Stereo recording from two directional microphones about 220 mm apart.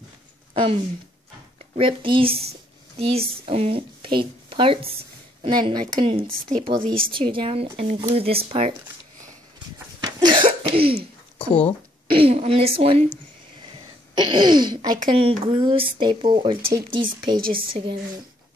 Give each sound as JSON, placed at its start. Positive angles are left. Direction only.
{"t": 1.8, "sound": "a woman's voice", "side_deg": -25}
{"t": 9.9, "sound": "cough", "side_deg": -20}
{"t": 11.3, "sound": "speech", "side_deg": 25}
{"t": 12.1, "sound": "speech", "side_deg": -25}